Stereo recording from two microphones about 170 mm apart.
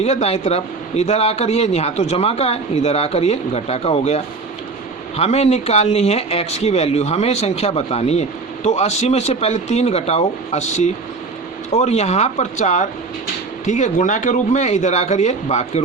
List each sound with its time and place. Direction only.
0.0 s a man's voice: 40° left (ahead or behind)